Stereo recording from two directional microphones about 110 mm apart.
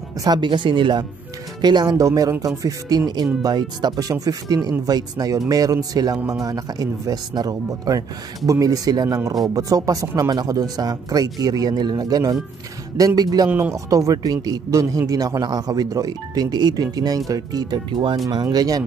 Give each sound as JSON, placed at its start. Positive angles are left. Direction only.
{"t": 0.2, "sound": "speech", "side_deg": -45}
{"t": 13.5, "sound": "speech", "side_deg": -15}
{"t": 13.8, "sound": "speech", "side_deg": -30}